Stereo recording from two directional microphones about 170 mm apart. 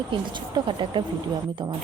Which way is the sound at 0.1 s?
25° right (ahead or behind).